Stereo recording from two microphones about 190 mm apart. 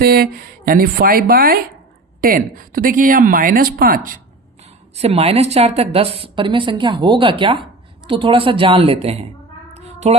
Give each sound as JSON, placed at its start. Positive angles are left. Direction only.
{"t": 0.0, "sound": "speech", "side_deg": -50}
{"t": 4.6, "sound": "a woman's voice", "side_deg": -35}
{"t": 9.7, "sound": "a sound", "side_deg": -35}